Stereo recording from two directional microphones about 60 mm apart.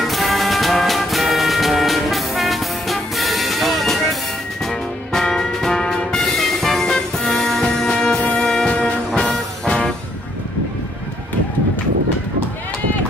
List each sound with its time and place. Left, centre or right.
0.0 s music: centre
8.8 s music: centre